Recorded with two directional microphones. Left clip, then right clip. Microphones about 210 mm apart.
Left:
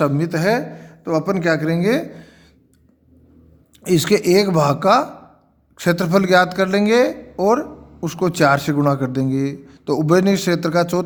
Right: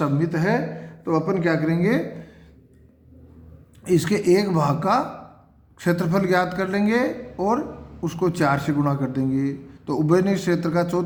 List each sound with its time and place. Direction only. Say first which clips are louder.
0.0 s a man's voice: left 5 dB; 50° left (ahead or behind)
3.8 s a man's voice: left 4 dB; 50° left (ahead or behind)